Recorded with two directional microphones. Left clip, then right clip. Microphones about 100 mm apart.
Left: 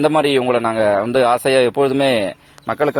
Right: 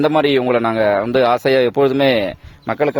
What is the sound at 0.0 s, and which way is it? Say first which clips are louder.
Speech: even; 90° right.